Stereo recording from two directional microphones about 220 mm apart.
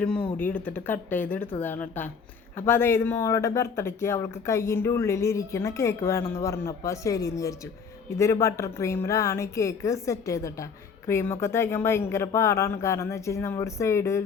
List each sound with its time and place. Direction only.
0.3 s a woman's voice: 5° left (ahead or behind)